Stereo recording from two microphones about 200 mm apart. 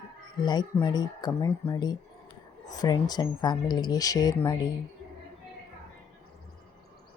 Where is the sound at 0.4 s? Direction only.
20° left (ahead or behind).